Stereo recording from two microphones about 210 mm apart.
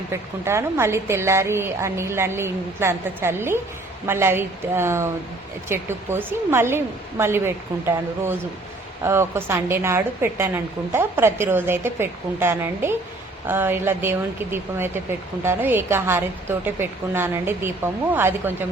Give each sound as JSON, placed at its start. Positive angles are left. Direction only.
{"t": 0.1, "sound": "a woman's voice", "side_deg": -10}